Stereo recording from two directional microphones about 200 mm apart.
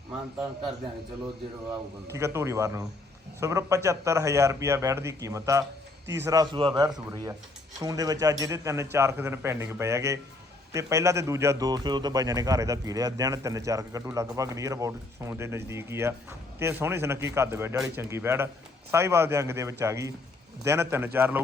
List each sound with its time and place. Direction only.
2.1 s a man's voice: 15° right (ahead or behind)